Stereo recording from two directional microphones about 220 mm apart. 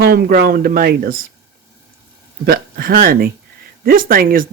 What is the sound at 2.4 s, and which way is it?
A man's voice, 40° right (ahead or behind).